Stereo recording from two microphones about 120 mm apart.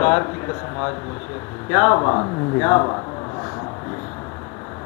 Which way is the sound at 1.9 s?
30° left (ahead or behind).